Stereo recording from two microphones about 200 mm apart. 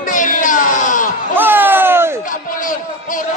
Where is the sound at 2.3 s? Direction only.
40° left (ahead or behind).